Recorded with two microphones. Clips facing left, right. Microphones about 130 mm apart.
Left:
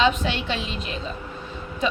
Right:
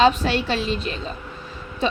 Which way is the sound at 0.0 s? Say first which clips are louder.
Right 4 dB; 40° right (ahead or behind).